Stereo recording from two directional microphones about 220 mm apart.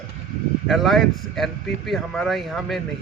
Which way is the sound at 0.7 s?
Centre (ahead or behind).